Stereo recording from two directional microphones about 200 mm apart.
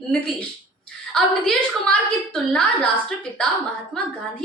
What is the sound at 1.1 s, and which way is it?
A woman's voice, 5° left (ahead or behind).